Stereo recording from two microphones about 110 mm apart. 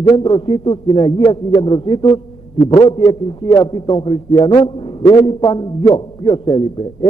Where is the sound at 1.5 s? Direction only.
45° left (ahead or behind).